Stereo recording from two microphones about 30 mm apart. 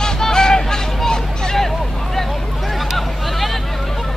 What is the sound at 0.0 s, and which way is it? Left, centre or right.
Vehicle, left.